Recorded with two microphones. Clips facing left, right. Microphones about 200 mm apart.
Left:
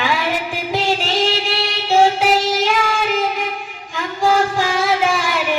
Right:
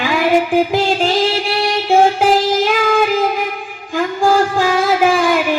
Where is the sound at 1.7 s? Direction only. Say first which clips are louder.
Right 2 dB; 50° right (ahead or behind).